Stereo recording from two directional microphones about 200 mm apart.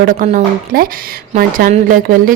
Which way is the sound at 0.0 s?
40° right (ahead or behind).